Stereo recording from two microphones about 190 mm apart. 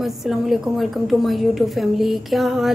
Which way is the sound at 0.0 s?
Centre (ahead or behind).